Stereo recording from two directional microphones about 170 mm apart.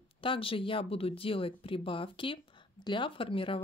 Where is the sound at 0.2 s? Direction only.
30° left (ahead or behind).